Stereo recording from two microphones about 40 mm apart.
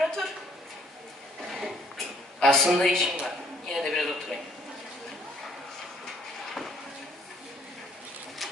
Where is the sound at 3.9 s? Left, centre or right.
Centre.